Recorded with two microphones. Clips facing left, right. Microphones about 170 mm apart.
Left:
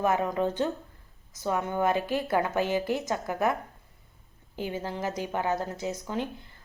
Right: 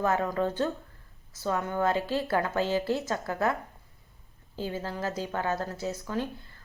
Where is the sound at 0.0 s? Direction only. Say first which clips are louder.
Left 1 dB; 15° left (ahead or behind).